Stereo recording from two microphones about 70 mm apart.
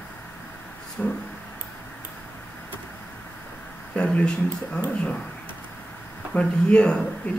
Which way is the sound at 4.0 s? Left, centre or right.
Centre.